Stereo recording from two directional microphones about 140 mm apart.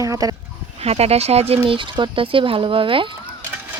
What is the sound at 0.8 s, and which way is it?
Speech, 45° right (ahead or behind).